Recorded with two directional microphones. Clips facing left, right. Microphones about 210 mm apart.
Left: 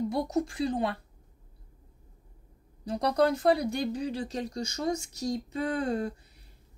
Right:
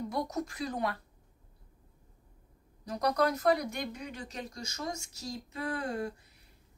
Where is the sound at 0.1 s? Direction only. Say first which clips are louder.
Left 5 dB; 30° left (ahead or behind).